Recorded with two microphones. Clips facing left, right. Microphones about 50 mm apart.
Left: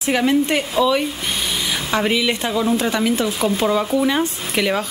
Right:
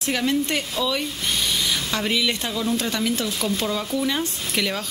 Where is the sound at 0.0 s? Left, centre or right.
Centre.